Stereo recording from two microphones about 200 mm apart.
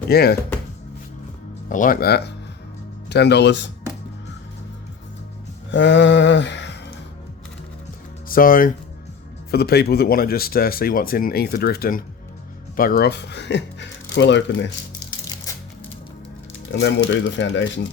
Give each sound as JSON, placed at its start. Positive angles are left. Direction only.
{"t": 0.1, "sound": "speech", "side_deg": 50}
{"t": 1.7, "sound": "speech", "side_deg": 45}
{"t": 5.7, "sound": "speech", "side_deg": 65}
{"t": 8.3, "sound": "speech", "side_deg": 45}
{"t": 16.8, "sound": "speech", "side_deg": 65}